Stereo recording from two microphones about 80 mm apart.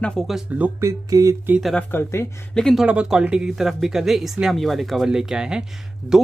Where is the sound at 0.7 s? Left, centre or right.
Right.